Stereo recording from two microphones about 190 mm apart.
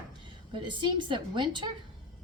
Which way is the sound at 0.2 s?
25° right (ahead or behind).